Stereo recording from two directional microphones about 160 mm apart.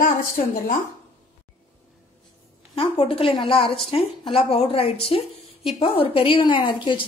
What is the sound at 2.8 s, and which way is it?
A woman's voice, 35° left (ahead or behind).